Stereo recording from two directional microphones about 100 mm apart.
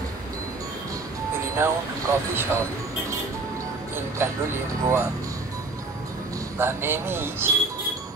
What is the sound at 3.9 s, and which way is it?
Speech, 25° right (ahead or behind).